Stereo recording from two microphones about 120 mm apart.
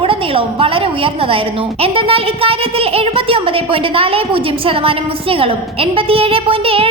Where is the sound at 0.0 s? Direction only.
50° right (ahead or behind).